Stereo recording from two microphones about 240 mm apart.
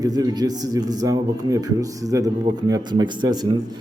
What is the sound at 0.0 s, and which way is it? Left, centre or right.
A man's voice, centre.